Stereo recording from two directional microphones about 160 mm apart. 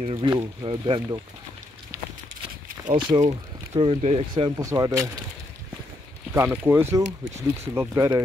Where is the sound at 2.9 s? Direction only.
30° right (ahead or behind).